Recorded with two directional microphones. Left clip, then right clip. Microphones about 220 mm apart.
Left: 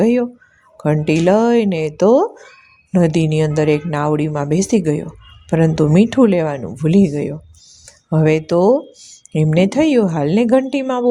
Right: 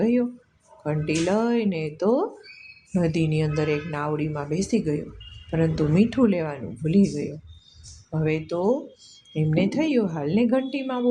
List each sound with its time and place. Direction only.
0.0 s speech: 40° left (ahead or behind)